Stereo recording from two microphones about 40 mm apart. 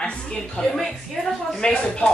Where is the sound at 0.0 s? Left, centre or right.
Left.